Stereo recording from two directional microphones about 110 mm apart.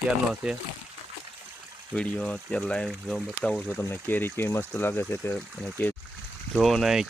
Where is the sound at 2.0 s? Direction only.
10° left (ahead or behind).